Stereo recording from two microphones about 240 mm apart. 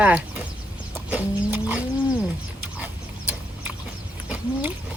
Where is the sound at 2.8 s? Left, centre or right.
Centre.